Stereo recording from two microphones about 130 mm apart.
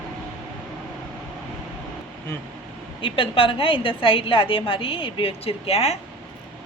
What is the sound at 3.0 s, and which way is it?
A woman's voice, 45° left (ahead or behind).